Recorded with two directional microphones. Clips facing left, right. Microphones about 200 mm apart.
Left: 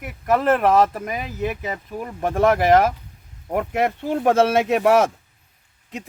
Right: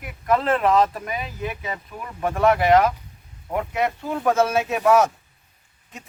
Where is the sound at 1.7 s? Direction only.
40° left (ahead or behind).